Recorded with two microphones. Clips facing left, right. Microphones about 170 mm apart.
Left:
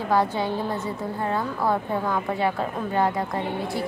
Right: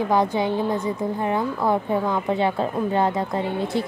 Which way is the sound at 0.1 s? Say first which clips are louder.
Left 1 dB; 15° right (ahead or behind).